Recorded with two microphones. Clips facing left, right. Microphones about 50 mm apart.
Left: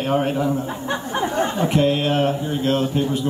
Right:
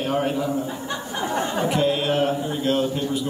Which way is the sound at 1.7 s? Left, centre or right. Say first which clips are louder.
Left 1 dB; left.